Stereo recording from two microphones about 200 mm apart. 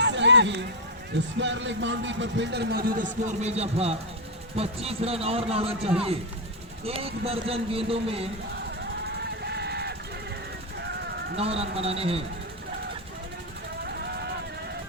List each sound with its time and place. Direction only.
0.0 s a sound: 60° right (ahead or behind)
1.4 s a man's voice: 65° right (ahead or behind); by 8.3 s 30° right (ahead or behind)
9.4 s vehicle: 55° right (ahead or behind)
11.3 s a man's voice: 30° right (ahead or behind)